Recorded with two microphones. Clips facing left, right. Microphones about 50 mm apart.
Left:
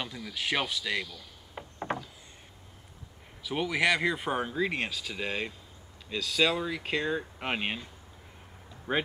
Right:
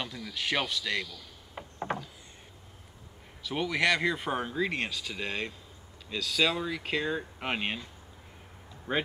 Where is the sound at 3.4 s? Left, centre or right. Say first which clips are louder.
Even; centre.